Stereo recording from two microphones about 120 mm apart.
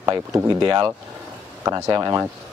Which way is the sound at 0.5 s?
40° right (ahead or behind).